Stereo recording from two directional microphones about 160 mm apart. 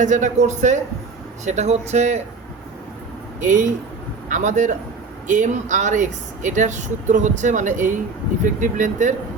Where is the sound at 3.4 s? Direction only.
50° right (ahead or behind).